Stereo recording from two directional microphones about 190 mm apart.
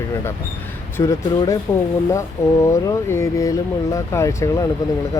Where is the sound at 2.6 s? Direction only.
15° left (ahead or behind).